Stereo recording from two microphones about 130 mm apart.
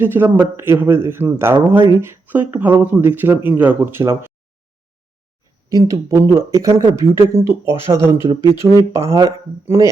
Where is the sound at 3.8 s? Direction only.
25° right (ahead or behind).